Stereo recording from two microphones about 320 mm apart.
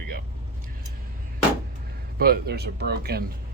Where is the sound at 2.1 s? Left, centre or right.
Right.